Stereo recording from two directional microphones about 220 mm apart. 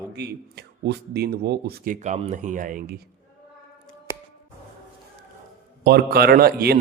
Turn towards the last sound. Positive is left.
turn(degrees=-45)  # may be behind; listen again after turning